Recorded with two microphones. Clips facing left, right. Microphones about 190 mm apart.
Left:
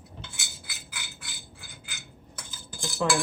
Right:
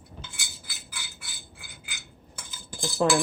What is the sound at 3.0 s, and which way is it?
Speech, 40° right (ahead or behind).